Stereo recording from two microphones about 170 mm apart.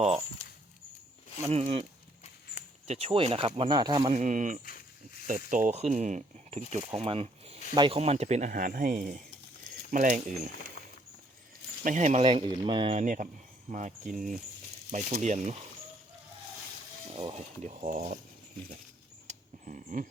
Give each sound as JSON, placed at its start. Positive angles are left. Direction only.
{"t": 1.5, "sound": "speech", "side_deg": -40}
{"t": 4.1, "sound": "speech", "side_deg": -45}
{"t": 11.8, "sound": "speech", "side_deg": -50}
{"t": 12.2, "sound": "speech", "side_deg": -30}
{"t": 17.2, "sound": "speech", "side_deg": -35}
{"t": 19.3, "sound": "a sound", "side_deg": -45}